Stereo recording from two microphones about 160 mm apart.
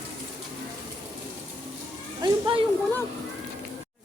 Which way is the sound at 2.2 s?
30° right (ahead or behind).